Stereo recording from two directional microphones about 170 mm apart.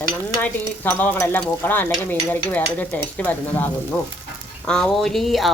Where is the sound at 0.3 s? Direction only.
15° left (ahead or behind).